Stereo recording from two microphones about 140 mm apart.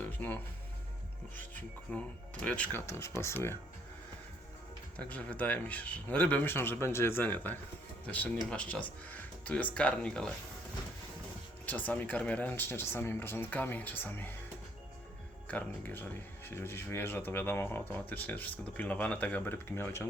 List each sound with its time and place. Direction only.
0.0 s music: 15° left (ahead or behind)
1.9 s speech: 10° left (ahead or behind)
4.9 s speech: 10° left (ahead or behind)
11.6 s speech: 10° left (ahead or behind)
15.4 s speech: 10° left (ahead or behind)